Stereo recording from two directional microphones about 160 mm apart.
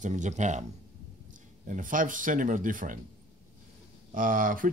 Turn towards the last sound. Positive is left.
turn(degrees=-60)  # may be behind; listen again after turning